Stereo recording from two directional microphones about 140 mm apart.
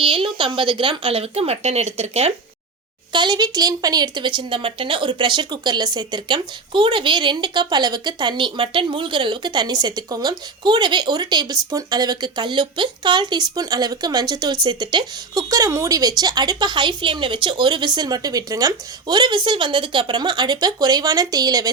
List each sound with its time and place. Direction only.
0.0 s speech: 40° right (ahead or behind)
3.1 s speech: 35° right (ahead or behind)